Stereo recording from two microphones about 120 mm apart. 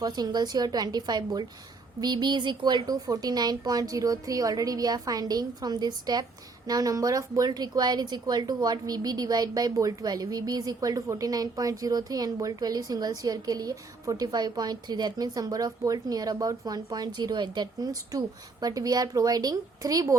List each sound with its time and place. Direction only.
0.0 s a woman's voice: 35° right (ahead or behind)